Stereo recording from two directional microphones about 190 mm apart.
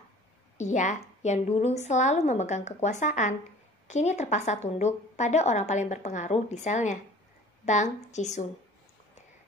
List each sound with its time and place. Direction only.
0.6 s a woman's voice: 40° left (ahead or behind)